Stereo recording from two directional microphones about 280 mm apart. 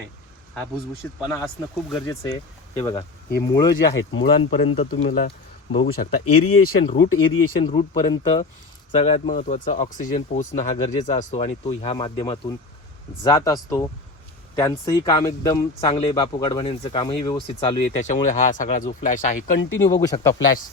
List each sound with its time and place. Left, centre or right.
1.0 s speech: centre
4.1 s speech: left
4.6 s speech: left
6.2 s speech: left
7.6 s speech: centre
19.9 s speech: centre